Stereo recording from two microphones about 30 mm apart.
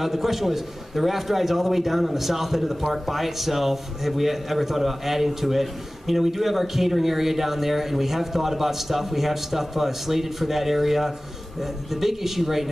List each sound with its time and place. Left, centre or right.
0.0 s a man's voice: centre